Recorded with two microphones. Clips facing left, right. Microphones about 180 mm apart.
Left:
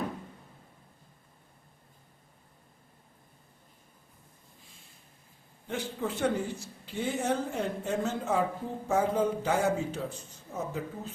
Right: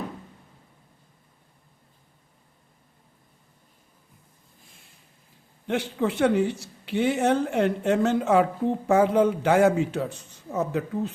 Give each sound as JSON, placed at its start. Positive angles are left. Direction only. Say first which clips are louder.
{"t": 5.6, "sound": "speech", "louder": "right 8 dB", "side_deg": -75}